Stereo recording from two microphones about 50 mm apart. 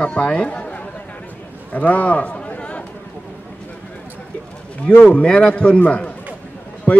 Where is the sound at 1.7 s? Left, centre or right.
Left.